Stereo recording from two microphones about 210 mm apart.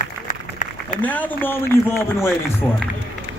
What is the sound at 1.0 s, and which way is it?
A man's voice, 10° left (ahead or behind).